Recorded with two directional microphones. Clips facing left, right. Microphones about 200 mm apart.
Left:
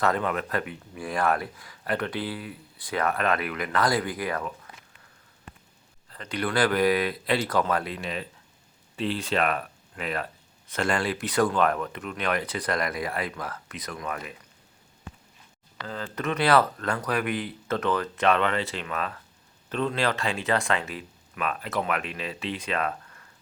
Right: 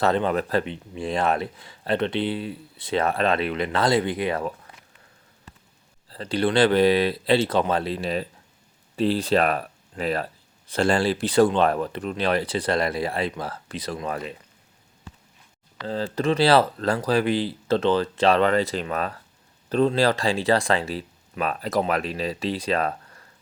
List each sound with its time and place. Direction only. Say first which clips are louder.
0.0 s speech: right 4 dB; 30° right (ahead or behind)
6.1 s speech: right 7 dB; 30° right (ahead or behind)
15.9 s speech: right 7 dB; 30° right (ahead or behind)